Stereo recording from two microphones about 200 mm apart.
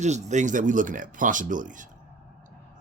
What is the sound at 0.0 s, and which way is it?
Speech, 35° right (ahead or behind).